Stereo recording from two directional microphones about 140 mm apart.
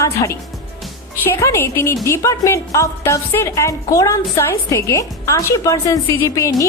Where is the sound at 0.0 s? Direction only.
20° left (ahead or behind).